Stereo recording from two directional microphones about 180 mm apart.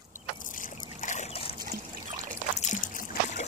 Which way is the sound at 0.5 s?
45° left (ahead or behind).